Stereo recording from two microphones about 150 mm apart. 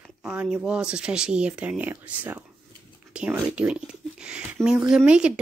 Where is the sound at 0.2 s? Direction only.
5° right (ahead or behind).